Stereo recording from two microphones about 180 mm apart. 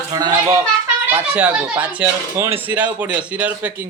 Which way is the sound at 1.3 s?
10° right (ahead or behind).